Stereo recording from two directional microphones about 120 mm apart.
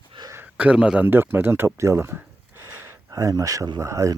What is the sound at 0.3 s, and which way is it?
Speech, 15° right (ahead or behind).